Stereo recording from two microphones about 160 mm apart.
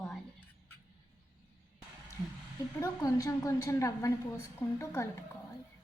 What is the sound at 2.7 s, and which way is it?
A woman's voice, 20° left (ahead or behind).